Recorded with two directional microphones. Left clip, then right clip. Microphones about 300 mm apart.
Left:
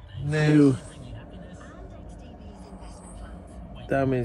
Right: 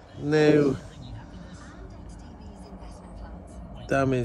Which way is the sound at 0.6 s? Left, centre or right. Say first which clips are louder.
Left 3 dB; right.